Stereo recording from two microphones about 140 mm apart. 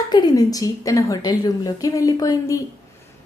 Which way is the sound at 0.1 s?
30° left (ahead or behind).